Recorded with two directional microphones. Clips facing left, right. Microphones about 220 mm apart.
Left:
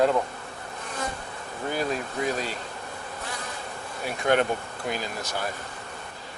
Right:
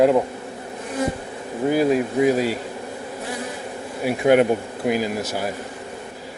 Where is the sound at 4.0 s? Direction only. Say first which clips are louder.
Right 8 dB; 5° right (ahead or behind).